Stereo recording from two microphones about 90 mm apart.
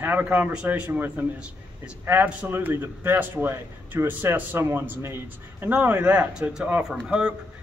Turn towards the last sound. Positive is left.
turn(degrees=-10)  # may be behind; listen again after turning